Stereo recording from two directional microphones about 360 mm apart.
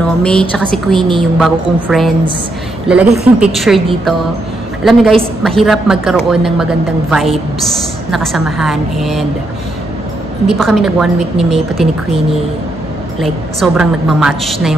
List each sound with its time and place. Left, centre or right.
0.2 s a woman's voice: centre
10.4 s a woman's voice: centre